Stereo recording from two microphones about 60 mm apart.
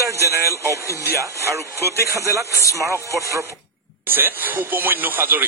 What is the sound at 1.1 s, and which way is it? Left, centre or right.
A man's voice, right.